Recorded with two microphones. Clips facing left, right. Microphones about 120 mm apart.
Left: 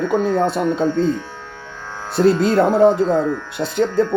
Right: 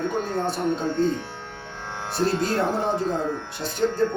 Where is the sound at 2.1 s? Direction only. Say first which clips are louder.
Left 9 dB; 60° left (ahead or behind).